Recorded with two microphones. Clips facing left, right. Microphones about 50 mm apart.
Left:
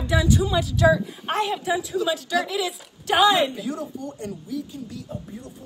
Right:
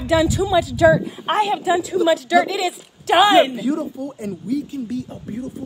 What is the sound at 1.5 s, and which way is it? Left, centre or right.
A woman's voice, right.